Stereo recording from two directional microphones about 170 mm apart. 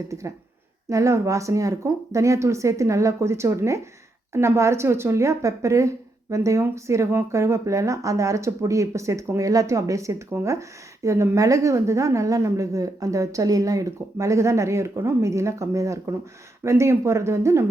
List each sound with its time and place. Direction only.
0.1 s a woman's voice: 20° right (ahead or behind)